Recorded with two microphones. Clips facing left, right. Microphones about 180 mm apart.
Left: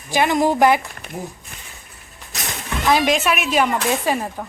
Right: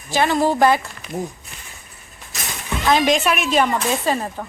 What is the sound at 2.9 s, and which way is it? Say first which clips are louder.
Speech: right 1 dB; 5° left (ahead or behind).